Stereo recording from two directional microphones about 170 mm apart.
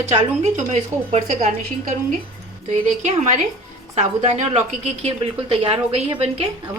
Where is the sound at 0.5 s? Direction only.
40° right (ahead or behind).